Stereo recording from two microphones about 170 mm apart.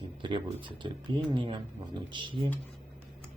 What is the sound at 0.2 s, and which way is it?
Speech, 30° right (ahead or behind).